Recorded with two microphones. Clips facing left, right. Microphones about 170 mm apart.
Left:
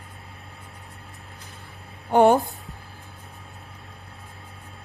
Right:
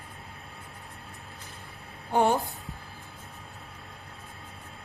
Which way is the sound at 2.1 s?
60° left (ahead or behind).